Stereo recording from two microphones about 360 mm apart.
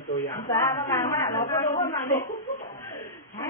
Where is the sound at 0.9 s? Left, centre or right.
Centre.